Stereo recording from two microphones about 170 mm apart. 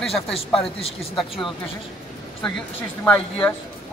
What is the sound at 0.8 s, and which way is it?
Speech, 35° left (ahead or behind).